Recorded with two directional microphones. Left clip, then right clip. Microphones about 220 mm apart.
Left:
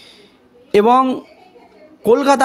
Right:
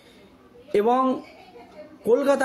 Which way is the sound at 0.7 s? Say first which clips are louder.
Left 8 dB; 45° left (ahead or behind).